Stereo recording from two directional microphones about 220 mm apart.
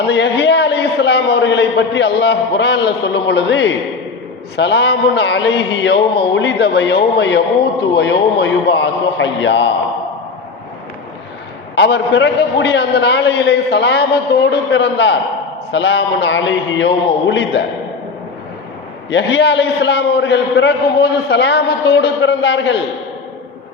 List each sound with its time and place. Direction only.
0.1 s a man's voice: 50° left (ahead or behind)
11.7 s a man's voice: 55° left (ahead or behind)
19.1 s a man's voice: 50° left (ahead or behind)